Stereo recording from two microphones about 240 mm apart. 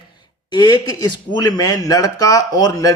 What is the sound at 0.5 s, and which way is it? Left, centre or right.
A man's voice, centre.